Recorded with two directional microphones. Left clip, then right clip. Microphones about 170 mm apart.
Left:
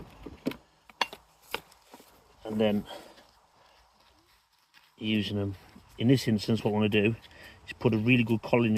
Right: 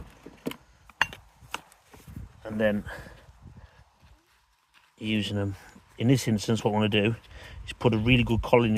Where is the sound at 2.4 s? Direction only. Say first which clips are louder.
Right 2 dB; 55° right (ahead or behind).